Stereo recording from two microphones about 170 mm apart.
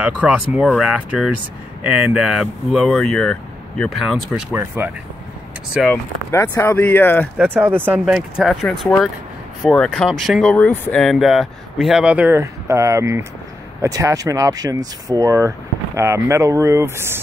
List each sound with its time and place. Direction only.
0.0 s speech: 5° right (ahead or behind)
6.3 s speech: 15° left (ahead or behind)
7.3 s speech: 10° right (ahead or behind)
8.0 s speech: centre (ahead or behind)